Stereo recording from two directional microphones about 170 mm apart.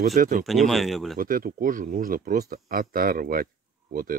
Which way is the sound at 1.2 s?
55° right (ahead or behind).